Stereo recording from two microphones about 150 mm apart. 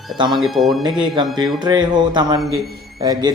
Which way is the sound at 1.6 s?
30° right (ahead or behind).